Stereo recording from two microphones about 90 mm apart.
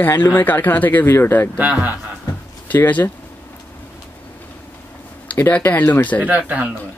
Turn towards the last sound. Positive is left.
turn(degrees=-15)  # may be behind; listen again after turning